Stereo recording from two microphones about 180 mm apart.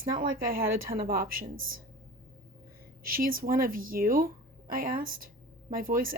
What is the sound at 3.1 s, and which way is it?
A woman's voice, 50° right (ahead or behind).